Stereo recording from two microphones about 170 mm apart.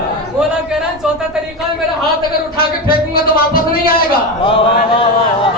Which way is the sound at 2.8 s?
60° left (ahead or behind).